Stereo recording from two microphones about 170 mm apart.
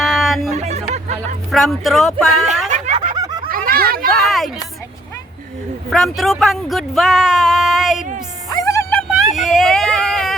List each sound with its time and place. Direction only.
0.0 s music: centre (ahead or behind)
0.5 s music: 40° right (ahead or behind)
1.5 s speech: centre (ahead or behind)
2.6 s snicker: 45° right (ahead or behind)
3.5 s a sound: 60° right (ahead or behind)
4.1 s a sound: centre (ahead or behind)
5.9 s speech: centre (ahead or behind)
8.4 s music: 20° left (ahead or behind)
8.9 s vehicle: 5° left (ahead or behind)